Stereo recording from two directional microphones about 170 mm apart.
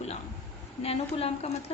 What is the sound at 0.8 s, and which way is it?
Speech, 35° left (ahead or behind).